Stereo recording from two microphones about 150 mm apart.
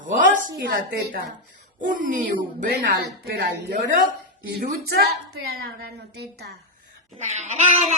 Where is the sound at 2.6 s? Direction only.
90° right.